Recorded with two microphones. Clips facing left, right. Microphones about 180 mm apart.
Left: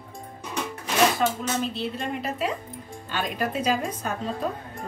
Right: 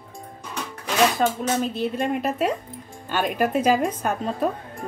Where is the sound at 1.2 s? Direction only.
45° right (ahead or behind).